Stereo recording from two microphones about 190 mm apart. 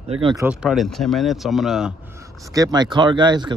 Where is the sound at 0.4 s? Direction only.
5° right (ahead or behind).